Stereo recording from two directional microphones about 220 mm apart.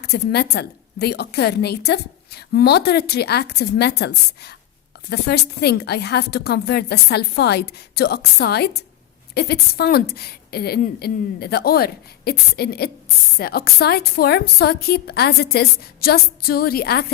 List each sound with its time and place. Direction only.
0.0 s a woman's voice: 45° left (ahead or behind)